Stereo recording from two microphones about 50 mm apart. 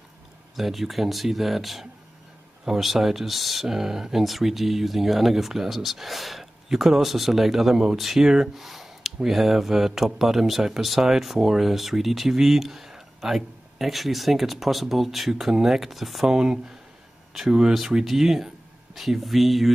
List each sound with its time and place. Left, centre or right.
0.6 s speech: centre
16.3 s speech: centre